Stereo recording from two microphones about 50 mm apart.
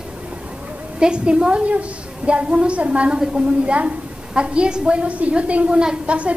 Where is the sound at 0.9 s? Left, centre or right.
Centre.